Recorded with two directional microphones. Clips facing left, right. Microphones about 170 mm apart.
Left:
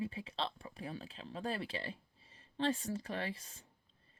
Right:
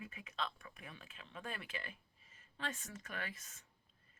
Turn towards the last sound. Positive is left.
turn(degrees=30)  # may be behind; listen again after turning